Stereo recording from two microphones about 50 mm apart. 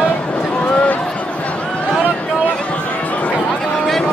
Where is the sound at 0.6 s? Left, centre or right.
Left.